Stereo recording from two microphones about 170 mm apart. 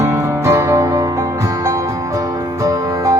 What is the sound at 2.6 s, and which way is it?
Music, 20° right (ahead or behind).